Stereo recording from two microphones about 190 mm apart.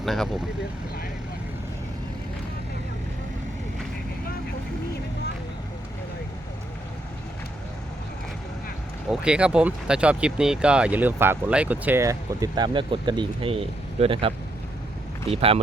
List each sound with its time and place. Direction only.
0.0 s speech: centre (ahead or behind)
9.0 s speech: 5° right (ahead or behind); by 15.6 s 30° right (ahead or behind)